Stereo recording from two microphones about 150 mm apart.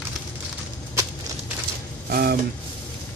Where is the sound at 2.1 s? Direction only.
90° right.